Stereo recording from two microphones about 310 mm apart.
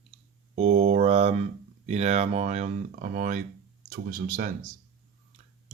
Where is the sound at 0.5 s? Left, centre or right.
Right.